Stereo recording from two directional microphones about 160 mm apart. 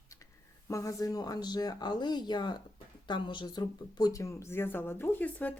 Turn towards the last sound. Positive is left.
turn(degrees=10)  # may be behind; listen again after turning